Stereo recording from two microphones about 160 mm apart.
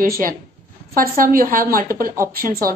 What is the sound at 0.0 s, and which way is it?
A woman's voice, 65° right (ahead or behind).